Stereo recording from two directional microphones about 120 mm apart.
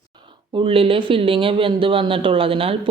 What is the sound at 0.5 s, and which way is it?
Speech, 50° right (ahead or behind).